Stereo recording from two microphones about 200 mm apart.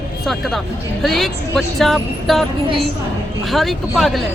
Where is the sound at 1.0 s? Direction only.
Centre (ahead or behind).